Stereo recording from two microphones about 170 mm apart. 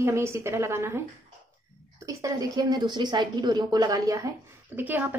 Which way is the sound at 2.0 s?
20° right (ahead or behind).